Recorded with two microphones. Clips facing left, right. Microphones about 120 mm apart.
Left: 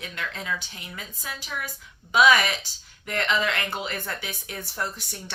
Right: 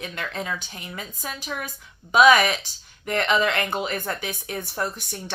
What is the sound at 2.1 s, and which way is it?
A woman's voice, 40° right (ahead or behind).